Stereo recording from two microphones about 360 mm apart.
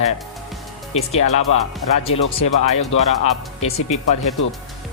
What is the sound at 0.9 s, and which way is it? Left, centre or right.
Speech, centre.